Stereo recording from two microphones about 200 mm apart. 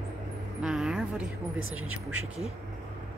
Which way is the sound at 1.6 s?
90° right.